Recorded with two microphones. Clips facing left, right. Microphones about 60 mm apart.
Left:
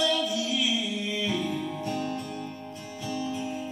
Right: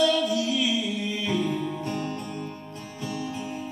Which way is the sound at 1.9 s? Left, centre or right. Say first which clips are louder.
Even; right.